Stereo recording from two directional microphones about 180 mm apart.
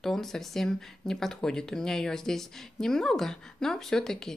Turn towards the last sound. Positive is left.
turn(degrees=5)  # may be behind; listen again after turning